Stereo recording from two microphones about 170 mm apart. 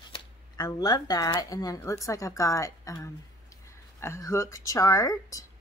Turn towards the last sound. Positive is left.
turn(degrees=20)  # may be behind; listen again after turning